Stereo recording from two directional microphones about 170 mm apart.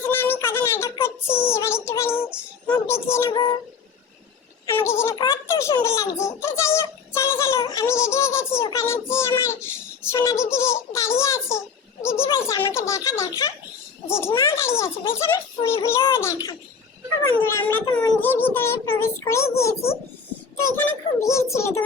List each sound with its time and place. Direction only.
0.1 s a sound: 15° left (ahead or behind)
1.4 s child singing: 15° left (ahead or behind)
2.6 s a child's voice: 10° left (ahead or behind)
4.6 s a child's voice: 15° left (ahead or behind)
20.7 s a child's voice: 15° left (ahead or behind)